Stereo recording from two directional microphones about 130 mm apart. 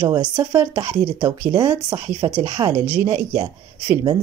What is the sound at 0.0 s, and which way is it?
Speech, 30° right (ahead or behind).